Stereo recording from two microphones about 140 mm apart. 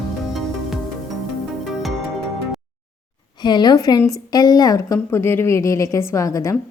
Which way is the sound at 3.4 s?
30° left (ahead or behind).